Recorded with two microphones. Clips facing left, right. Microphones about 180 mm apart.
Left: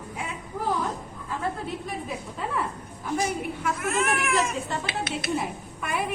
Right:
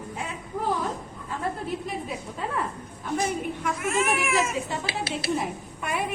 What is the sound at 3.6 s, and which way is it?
A woman's voice, centre (ahead or behind).